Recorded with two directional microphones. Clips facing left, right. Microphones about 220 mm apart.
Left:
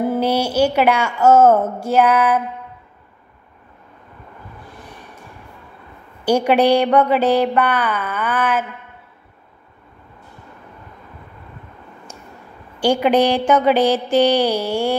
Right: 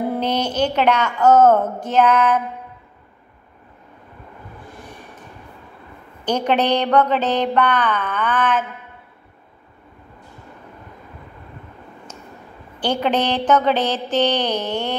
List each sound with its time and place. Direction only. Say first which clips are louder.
0.0 s speech: left 3 dB; 5° left (ahead or behind)
6.2 s mantra: left 5 dB; 10° left (ahead or behind)
12.8 s mantra: left 5 dB; 10° left (ahead or behind)